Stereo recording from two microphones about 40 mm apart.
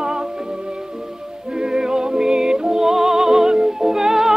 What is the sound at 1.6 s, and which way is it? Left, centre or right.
Music, centre.